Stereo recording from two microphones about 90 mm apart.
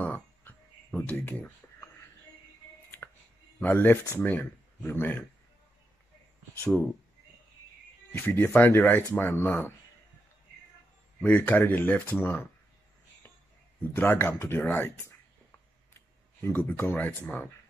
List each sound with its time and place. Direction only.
0.0 s a sound: 20° left (ahead or behind)
3.0 s a sound: 15° left (ahead or behind)
3.5 s speech: 20° left (ahead or behind)
8.1 s speech: 20° left (ahead or behind)
11.1 s speech: 20° left (ahead or behind)
13.9 s speech: 20° left (ahead or behind)
15.9 s speech: 25° left (ahead or behind)